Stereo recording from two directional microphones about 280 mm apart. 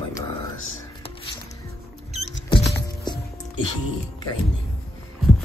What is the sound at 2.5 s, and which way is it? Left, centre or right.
Music, centre.